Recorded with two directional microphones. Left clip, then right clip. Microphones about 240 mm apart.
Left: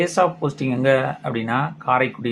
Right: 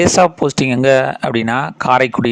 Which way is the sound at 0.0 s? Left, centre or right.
Right.